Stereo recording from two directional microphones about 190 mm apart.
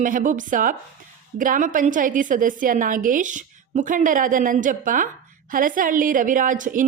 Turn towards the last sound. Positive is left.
turn(degrees=-45)  # may be behind; listen again after turning